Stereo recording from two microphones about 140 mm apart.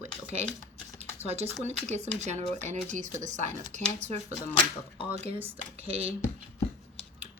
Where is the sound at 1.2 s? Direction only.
50° right (ahead or behind).